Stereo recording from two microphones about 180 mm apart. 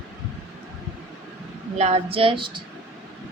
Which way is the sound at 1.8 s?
35° right (ahead or behind).